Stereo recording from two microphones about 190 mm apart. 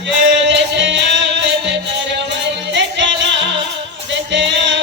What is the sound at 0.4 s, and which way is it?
Music, 70° right (ahead or behind).